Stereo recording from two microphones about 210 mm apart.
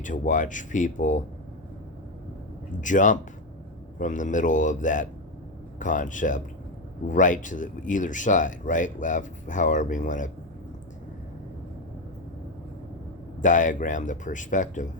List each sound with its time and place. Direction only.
0.0 s speech: 35° left (ahead or behind)
2.8 s speech: 35° left (ahead or behind)
13.4 s speech: 35° left (ahead or behind)